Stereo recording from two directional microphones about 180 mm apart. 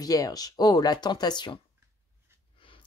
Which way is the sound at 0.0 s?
20° left (ahead or behind).